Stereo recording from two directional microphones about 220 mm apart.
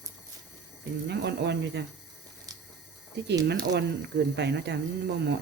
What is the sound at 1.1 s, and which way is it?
Speech, 50° right (ahead or behind).